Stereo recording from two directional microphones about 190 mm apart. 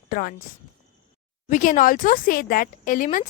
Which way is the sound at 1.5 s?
45° left (ahead or behind).